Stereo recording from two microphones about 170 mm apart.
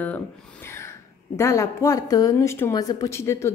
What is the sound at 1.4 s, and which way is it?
A woman's voice, 15° left (ahead or behind).